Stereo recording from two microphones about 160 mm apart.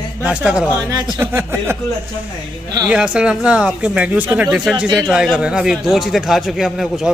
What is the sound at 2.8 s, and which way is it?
A man's voice, 5° right (ahead or behind).